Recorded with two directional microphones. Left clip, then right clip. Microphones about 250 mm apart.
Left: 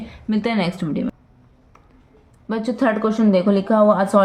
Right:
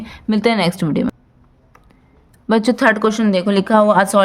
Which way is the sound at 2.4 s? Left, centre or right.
Right.